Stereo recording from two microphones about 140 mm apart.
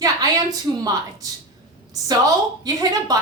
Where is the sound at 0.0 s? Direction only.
25° right (ahead or behind).